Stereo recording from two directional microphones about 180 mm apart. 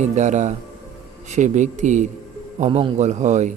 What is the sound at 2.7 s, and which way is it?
Speech, 30° right (ahead or behind).